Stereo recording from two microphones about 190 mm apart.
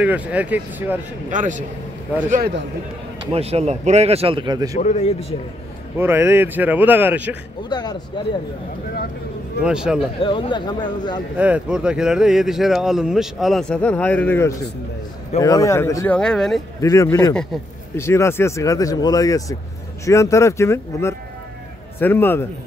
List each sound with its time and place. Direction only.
0.0 s speech: 5° right (ahead or behind)
1.3 s speech: 40° right (ahead or behind)
2.3 s speech: 55° right (ahead or behind)
3.3 s speech: 30° right (ahead or behind)
4.7 s speech: 40° left (ahead or behind)
5.9 s speech: 10° right (ahead or behind)
7.7 s speech: 20° left (ahead or behind)
9.6 s speech: 5° right (ahead or behind)
9.9 s speech: 30° left (ahead or behind)
11.3 s speech: 5° right (ahead or behind); by 16.2 s 15° left (ahead or behind)
16.2 s speech: 5° left (ahead or behind)
16.8 s speech: 15° left (ahead or behind)
17.3 s speech: 5° left (ahead or behind)